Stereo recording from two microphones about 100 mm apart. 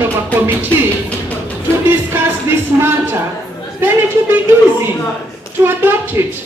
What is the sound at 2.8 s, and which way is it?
A woman's voice, 20° right (ahead or behind).